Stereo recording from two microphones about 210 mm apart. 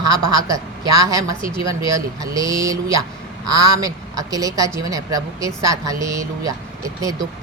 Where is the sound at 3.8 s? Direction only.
15° right (ahead or behind).